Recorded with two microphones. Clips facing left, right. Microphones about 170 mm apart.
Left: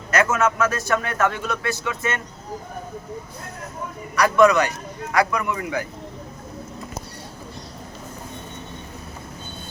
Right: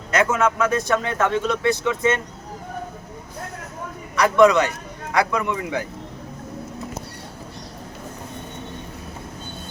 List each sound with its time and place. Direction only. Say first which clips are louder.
0.1 s a man's voice: even; 20° right (ahead or behind)
4.1 s a man's voice: right 1 dB; 20° right (ahead or behind)